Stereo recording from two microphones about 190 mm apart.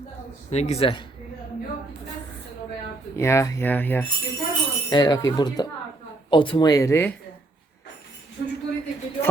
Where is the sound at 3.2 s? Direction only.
15° left (ahead or behind).